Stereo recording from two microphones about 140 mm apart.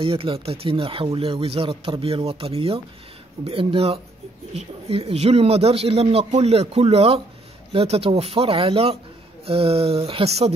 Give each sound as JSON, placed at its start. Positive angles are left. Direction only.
{"t": 0.0, "sound": "speech", "side_deg": -40}